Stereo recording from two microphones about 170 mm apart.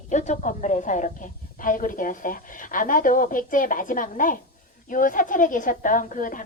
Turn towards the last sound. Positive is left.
turn(degrees=50)  # may be behind; listen again after turning